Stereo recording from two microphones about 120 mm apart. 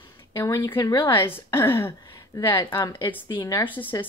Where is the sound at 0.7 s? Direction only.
30° left (ahead or behind).